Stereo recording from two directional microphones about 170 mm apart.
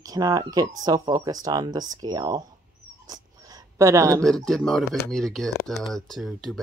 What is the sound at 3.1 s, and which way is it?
Sheep, 20° right (ahead or behind).